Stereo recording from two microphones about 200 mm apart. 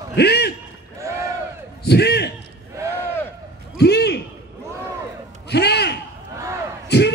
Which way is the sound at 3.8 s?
55° left (ahead or behind).